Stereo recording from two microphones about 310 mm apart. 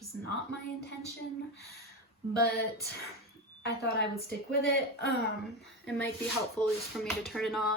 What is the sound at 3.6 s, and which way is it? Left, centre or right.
A woman's voice, left.